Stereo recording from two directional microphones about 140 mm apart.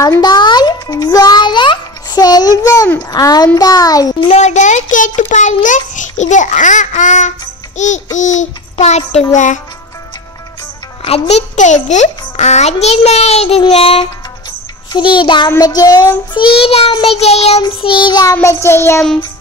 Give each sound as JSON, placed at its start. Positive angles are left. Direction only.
{"t": 0.0, "sound": "a child's voice", "side_deg": 25}
{"t": 4.3, "sound": "a child's voice", "side_deg": 55}
{"t": 11.1, "sound": "a child's voice", "side_deg": 45}
{"t": 12.8, "sound": "child singing", "side_deg": 50}
{"t": 15.5, "sound": "a child's voice", "side_deg": 25}
{"t": 16.3, "sound": "child singing", "side_deg": 40}
{"t": 18.3, "sound": "a child's voice", "side_deg": 20}